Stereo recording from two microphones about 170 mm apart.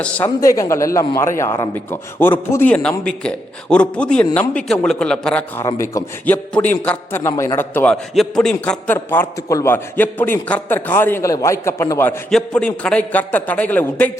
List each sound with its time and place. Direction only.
0.4 s a man's voice: 20° left (ahead or behind)